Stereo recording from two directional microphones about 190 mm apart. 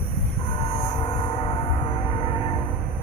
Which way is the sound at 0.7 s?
30° left (ahead or behind).